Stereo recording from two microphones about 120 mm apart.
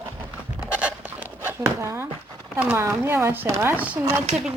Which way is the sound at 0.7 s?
10° right (ahead or behind).